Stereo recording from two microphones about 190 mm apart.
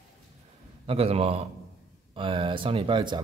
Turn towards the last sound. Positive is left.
turn(degrees=-25)  # may be behind; listen again after turning